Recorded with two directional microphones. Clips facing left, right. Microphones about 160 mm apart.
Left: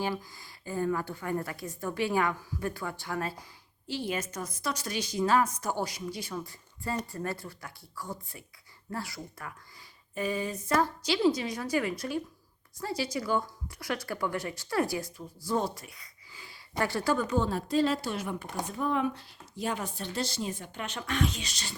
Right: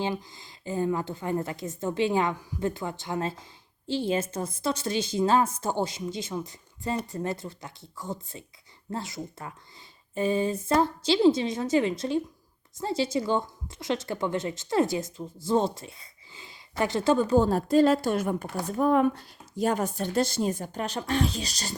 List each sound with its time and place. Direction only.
0.0 s a woman's voice: 20° right (ahead or behind); by 21.8 s 40° right (ahead or behind)